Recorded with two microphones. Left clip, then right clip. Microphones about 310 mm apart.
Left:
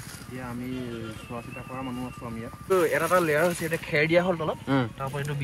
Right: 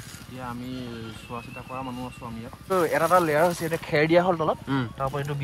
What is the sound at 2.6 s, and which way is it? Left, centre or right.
Speech, right.